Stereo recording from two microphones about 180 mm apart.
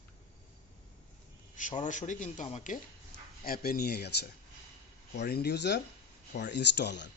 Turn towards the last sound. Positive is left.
turn(degrees=75)  # may be behind; listen again after turning